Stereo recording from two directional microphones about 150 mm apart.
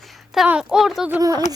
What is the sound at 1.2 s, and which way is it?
Speech, 25° right (ahead or behind).